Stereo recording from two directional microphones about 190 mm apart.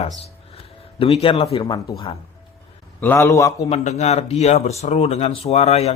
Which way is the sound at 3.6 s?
35° left (ahead or behind).